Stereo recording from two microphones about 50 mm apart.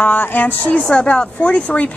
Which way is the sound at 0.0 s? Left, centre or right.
Left.